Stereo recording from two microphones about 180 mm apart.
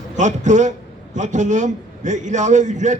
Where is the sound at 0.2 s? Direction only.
45° right (ahead or behind).